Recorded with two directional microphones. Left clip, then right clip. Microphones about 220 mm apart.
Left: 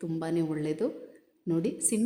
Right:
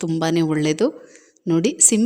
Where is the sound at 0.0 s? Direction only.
40° right (ahead or behind).